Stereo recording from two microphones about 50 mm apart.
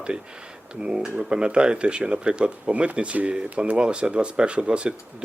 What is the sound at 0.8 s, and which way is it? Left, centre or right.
Speech, right.